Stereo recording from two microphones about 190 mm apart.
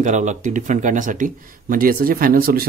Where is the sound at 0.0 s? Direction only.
40° right (ahead or behind).